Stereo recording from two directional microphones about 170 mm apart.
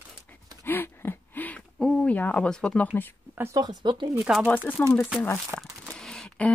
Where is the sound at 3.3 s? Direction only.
15° right (ahead or behind).